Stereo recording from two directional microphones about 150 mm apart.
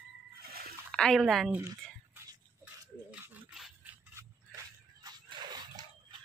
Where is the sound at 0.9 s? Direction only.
5° left (ahead or behind).